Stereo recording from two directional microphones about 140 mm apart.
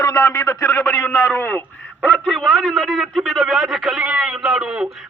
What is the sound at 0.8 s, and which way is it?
A man's voice, 5° left (ahead or behind).